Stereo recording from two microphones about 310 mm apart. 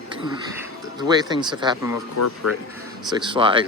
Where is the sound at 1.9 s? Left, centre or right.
Left.